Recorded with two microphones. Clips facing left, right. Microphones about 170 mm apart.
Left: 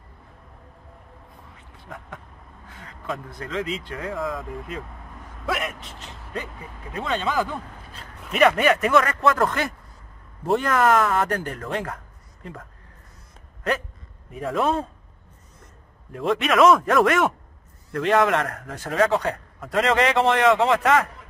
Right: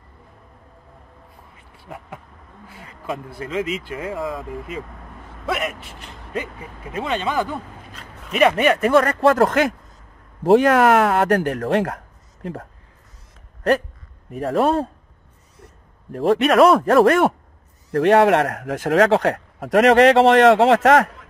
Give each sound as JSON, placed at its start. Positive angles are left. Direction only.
{"t": 1.8, "sound": "speech", "side_deg": -5}
{"t": 8.4, "sound": "speech", "side_deg": -25}
{"t": 9.4, "sound": "a man's voice", "side_deg": -75}
{"t": 14.4, "sound": "speech", "side_deg": -35}
{"t": 16.1, "sound": "speech", "side_deg": -35}
{"t": 17.9, "sound": "a man's voice", "side_deg": -60}